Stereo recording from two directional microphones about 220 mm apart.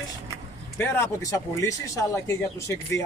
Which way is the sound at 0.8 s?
10° left (ahead or behind).